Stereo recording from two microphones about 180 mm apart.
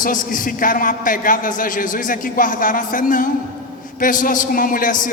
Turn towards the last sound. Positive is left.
turn(degrees=50)  # may be behind; listen again after turning